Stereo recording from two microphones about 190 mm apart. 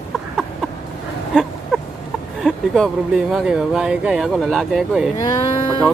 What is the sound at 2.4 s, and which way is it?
Speech, centre (ahead or behind).